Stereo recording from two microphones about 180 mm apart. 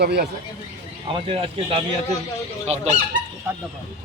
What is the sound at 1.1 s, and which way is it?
Speech, 30° right (ahead or behind).